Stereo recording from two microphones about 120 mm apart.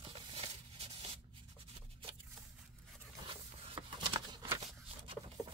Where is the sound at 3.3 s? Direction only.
45° right (ahead or behind).